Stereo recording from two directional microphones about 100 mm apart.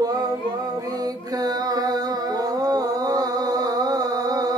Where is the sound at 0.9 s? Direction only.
40° right (ahead or behind).